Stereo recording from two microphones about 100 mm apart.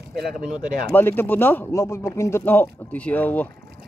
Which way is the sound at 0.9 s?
20° left (ahead or behind).